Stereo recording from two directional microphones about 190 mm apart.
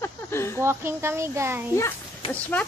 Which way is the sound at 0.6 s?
15° right (ahead or behind).